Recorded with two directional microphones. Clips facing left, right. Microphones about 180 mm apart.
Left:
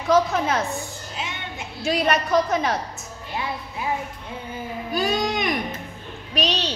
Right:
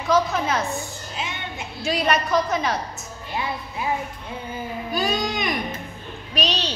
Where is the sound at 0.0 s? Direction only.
55° left (ahead or behind).